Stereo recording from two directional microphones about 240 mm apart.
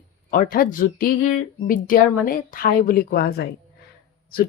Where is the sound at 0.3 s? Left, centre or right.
Left.